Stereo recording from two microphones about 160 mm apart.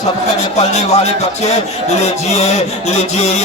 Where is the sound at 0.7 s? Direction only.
45° left (ahead or behind).